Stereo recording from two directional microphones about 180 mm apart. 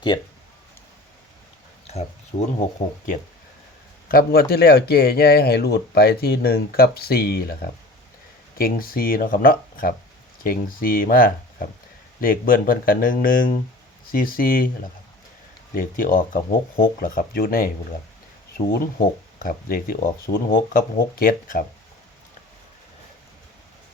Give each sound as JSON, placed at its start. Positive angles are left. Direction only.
{"t": 0.1, "sound": "speech", "side_deg": 20}
{"t": 2.3, "sound": "speech", "side_deg": 50}
{"t": 4.1, "sound": "speech", "side_deg": 60}
{"t": 8.5, "sound": "speech", "side_deg": 55}
{"t": 15.7, "sound": "speech", "side_deg": 50}
{"t": 19.4, "sound": "speech", "side_deg": 55}